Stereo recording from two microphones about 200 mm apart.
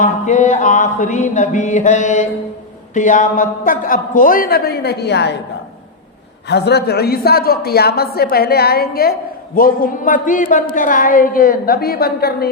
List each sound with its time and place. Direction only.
0.0 s a sound: 40° left (ahead or behind)
2.9 s a man's voice: 40° left (ahead or behind); by 5.4 s 55° left (ahead or behind)
6.5 s a man's voice: 55° left (ahead or behind)